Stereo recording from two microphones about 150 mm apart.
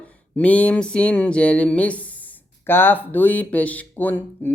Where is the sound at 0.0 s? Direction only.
10° left (ahead or behind).